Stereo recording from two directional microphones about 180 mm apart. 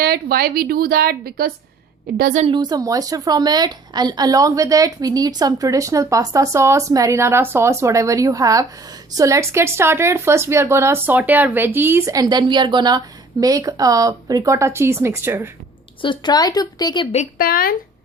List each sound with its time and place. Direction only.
0.0 s a woman's voice: 60° right (ahead or behind)
2.4 s a woman's voice: 25° right (ahead or behind)
16.0 s speech: 25° left (ahead or behind)
17.3 s speech: 55° left (ahead or behind)